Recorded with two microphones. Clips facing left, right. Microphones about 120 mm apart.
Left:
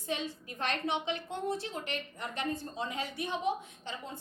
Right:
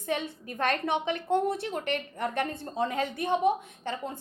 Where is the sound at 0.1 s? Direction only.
55° right (ahead or behind).